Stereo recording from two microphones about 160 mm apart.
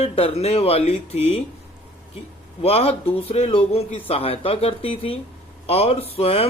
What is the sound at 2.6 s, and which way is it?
Speech, 40° left (ahead or behind).